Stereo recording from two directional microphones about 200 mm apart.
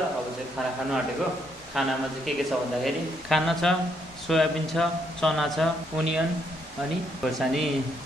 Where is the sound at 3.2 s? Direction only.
Centre (ahead or behind).